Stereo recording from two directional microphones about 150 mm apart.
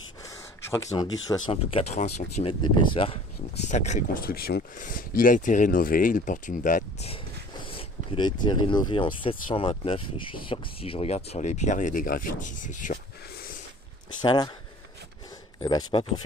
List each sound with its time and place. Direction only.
0.2 s speech: 20° left (ahead or behind); by 2.0 s 40° left (ahead or behind)
2.0 s speech: 50° left (ahead or behind)
3.7 s speech: 50° left (ahead or behind)
4.2 s speech: 85° left; by 6.8 s 65° left (ahead or behind)
7.6 s speech: 40° left (ahead or behind); by 13.6 s 90° left
14.2 s speech: 30° left (ahead or behind)
15.6 s speech: 30° left (ahead or behind)